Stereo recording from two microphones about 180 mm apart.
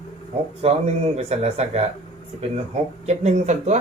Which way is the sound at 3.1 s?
40° right (ahead or behind).